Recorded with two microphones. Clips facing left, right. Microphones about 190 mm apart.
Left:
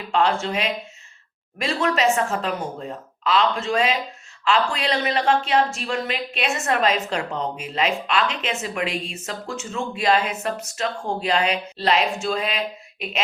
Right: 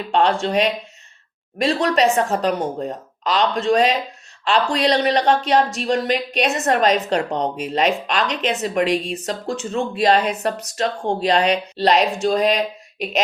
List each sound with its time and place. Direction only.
0.1 s speech: 35° right (ahead or behind)